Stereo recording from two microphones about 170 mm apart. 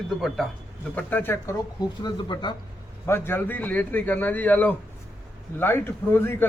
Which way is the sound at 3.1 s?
10° left (ahead or behind).